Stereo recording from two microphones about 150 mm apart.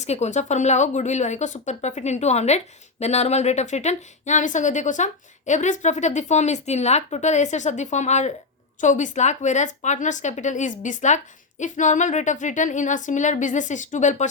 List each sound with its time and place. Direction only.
0.0 s a woman's voice: 50° left (ahead or behind)